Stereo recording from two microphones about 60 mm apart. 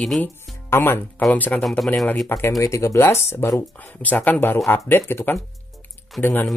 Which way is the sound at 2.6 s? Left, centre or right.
Left.